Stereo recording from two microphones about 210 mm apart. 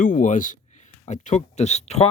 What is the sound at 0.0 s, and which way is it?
Speech, 40° left (ahead or behind).